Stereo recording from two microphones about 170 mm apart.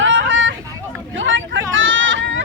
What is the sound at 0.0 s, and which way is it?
Hubbub, 90° right.